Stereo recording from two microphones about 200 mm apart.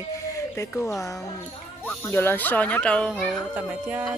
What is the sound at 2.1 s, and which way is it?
Speech, 10° left (ahead or behind).